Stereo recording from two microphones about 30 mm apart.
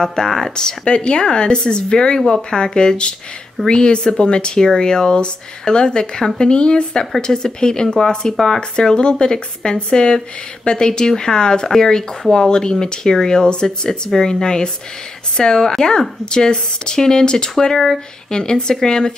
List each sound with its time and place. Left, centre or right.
0.0 s speech: centre
0.8 s speech: left
6.2 s speech: centre
6.5 s speech: left
17.7 s speech: centre
18.3 s speech: left